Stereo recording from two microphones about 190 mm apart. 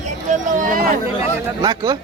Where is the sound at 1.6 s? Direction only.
20° right (ahead or behind).